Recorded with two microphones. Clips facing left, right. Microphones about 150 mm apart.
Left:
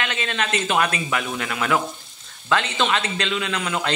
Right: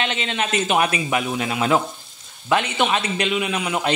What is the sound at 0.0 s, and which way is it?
A man's voice, 20° right (ahead or behind).